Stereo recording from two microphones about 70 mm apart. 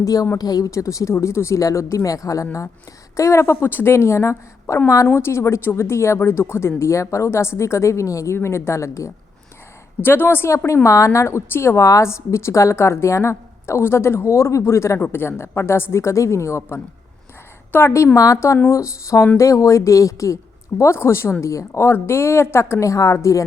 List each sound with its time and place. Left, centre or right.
0.0 s a woman's voice: left
0.7 s speech: left
10.0 s speech: left
10.8 s speech: left